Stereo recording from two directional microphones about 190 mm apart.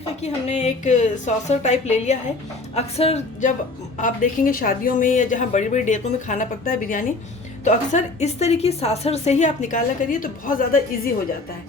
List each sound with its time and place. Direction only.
0.2 s a woman's voice: 35° left (ahead or behind)